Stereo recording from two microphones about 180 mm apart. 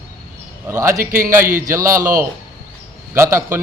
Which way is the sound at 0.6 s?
15° right (ahead or behind).